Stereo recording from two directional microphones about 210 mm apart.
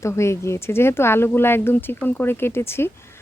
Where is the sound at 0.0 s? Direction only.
15° left (ahead or behind).